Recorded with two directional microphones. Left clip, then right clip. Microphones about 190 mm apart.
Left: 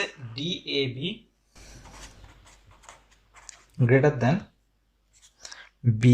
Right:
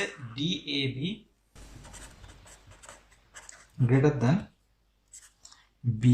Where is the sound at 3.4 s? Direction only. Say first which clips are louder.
Left 6 dB; 60° left (ahead or behind).